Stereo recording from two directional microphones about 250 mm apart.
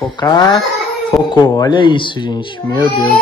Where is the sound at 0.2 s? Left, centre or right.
Centre.